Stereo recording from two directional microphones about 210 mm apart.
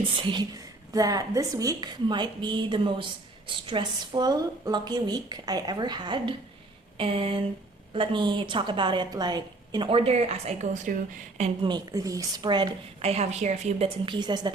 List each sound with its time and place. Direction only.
0.2 s a woman's voice: 20° right (ahead or behind)
6.9 s a sound: 25° right (ahead or behind)
7.9 s a woman's voice: 20° right (ahead or behind)